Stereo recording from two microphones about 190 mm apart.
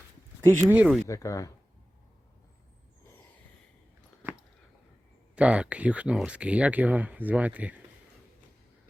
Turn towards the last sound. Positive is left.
turn(degrees=-10)  # may be behind; listen again after turning